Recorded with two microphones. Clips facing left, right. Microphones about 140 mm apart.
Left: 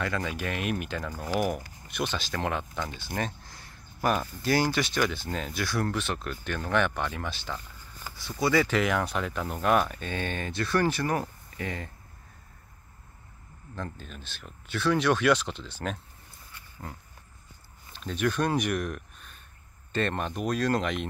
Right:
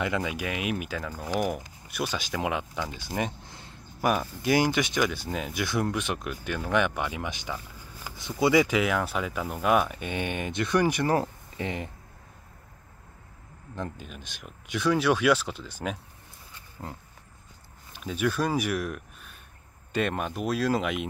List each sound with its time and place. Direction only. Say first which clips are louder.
0.0 s speech: right 2 dB; 15° right (ahead or behind)
10.0 s speech: right 2 dB; 15° right (ahead or behind)
13.7 s speech: right 2 dB; 10° right (ahead or behind)
16.8 s pig: right 2 dB; 25° right (ahead or behind)
17.9 s speech: even; 5° right (ahead or behind)